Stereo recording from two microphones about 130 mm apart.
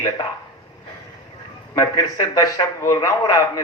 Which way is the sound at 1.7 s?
30° left (ahead or behind).